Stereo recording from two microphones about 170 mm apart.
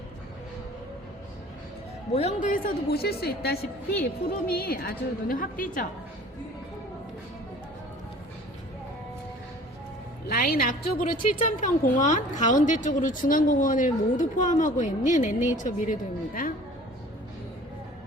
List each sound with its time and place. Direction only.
2.1 s a man's voice: 40° left (ahead or behind)
2.5 s a woman's voice: 65° left (ahead or behind)
10.2 s a woman's voice: 60° left (ahead or behind)